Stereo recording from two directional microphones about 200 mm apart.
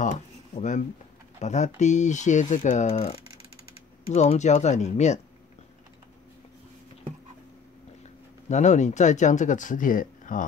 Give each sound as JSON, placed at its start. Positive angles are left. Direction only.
{"t": 0.6, "sound": "speech", "side_deg": 35}
{"t": 8.5, "sound": "speech", "side_deg": 35}